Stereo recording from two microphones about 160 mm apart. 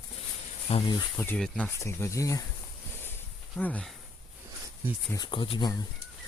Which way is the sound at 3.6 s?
10° left (ahead or behind).